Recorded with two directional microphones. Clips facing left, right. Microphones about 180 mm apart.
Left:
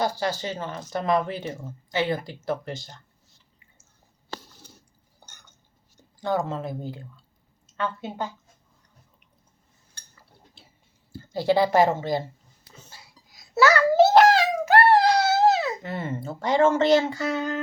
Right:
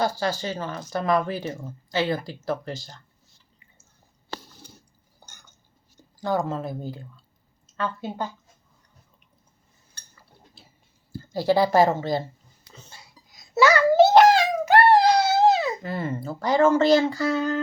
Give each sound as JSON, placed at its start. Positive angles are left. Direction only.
{"t": 0.0, "sound": "speech", "side_deg": 20}
{"t": 6.1, "sound": "speech", "side_deg": 25}
{"t": 11.2, "sound": "speech", "side_deg": 20}
{"t": 12.8, "sound": "a sound", "side_deg": 5}
{"t": 15.8, "sound": "speech", "side_deg": 25}